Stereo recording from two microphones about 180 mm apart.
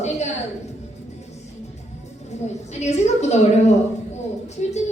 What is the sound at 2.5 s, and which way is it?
A woman's voice, 40° left (ahead or behind).